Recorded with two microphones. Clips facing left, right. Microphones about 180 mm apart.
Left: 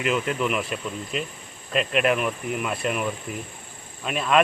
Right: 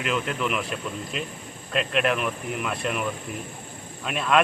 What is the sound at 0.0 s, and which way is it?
Speech, centre (ahead or behind).